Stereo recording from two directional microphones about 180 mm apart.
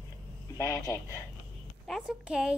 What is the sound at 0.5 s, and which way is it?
Speech, 15° left (ahead or behind).